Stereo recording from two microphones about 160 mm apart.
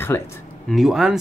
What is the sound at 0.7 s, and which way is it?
Speech, centre (ahead or behind).